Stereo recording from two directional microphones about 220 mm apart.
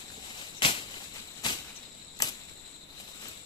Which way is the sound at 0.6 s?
20° left (ahead or behind).